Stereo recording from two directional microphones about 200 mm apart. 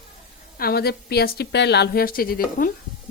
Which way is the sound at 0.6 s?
50° left (ahead or behind).